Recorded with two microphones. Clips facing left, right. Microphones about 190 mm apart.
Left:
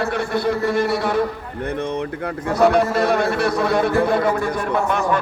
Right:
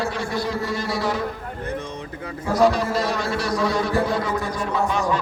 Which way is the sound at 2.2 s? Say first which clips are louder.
Left 1 dB; 60° left (ahead or behind).